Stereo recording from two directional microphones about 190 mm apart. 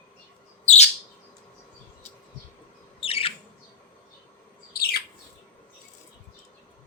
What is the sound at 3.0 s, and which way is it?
Squawk, 30° left (ahead or behind).